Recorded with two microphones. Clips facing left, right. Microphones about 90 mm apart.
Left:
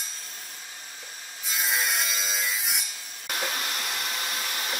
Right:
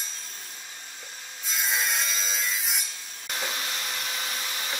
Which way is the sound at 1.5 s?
Centre (ahead or behind).